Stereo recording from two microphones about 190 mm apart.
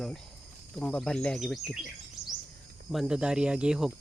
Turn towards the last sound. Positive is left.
turn(degrees=-5)  # may be behind; listen again after turning